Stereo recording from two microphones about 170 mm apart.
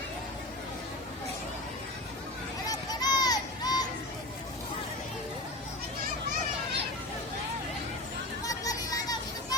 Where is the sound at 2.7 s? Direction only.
25° left (ahead or behind).